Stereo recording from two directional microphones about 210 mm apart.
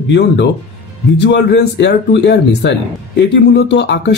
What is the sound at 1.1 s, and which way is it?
Speech, 50° left (ahead or behind).